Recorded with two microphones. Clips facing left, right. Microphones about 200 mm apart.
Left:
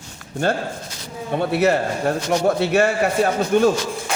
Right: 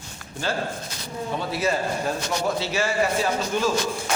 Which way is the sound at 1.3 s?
60° left (ahead or behind).